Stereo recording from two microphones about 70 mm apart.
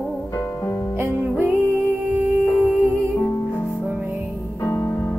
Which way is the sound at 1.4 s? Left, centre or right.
Right.